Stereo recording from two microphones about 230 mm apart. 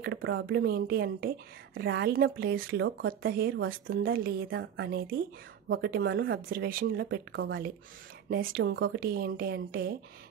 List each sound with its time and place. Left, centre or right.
0.0 s speech: right